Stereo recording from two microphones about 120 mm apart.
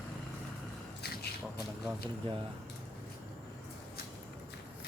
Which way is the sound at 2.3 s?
45° right (ahead or behind).